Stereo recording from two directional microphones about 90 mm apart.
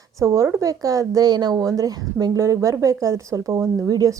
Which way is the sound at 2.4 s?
35° right (ahead or behind).